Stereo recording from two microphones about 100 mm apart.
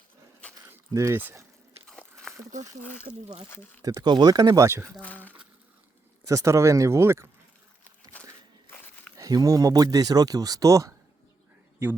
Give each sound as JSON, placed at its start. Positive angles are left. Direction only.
{"t": 0.7, "sound": "a sound", "side_deg": -25}
{"t": 1.2, "sound": "speech", "side_deg": -25}
{"t": 1.9, "sound": "biting", "side_deg": 5}
{"t": 3.8, "sound": "speech", "side_deg": -40}
{"t": 4.8, "sound": "speech", "side_deg": 10}
{"t": 6.2, "sound": "speech", "side_deg": -30}
{"t": 9.1, "sound": "speech", "side_deg": -35}